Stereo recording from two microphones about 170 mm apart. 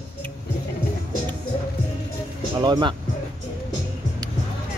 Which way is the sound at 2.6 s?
25° right (ahead or behind).